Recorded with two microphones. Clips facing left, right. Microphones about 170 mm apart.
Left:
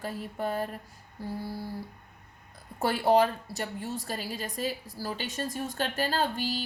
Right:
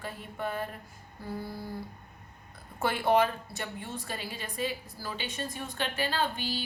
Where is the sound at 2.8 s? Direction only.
35° left (ahead or behind).